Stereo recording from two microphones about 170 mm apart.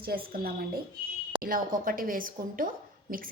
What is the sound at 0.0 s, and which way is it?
A woman's voice, 60° right (ahead or behind).